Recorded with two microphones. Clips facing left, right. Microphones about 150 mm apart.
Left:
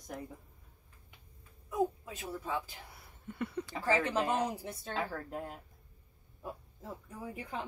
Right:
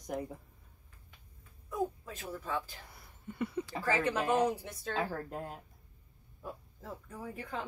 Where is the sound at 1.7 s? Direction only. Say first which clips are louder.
Left 3 dB; 15° left (ahead or behind).